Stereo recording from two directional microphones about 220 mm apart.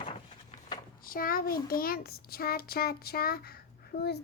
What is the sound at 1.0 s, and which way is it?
A child's voice, 40° left (ahead or behind).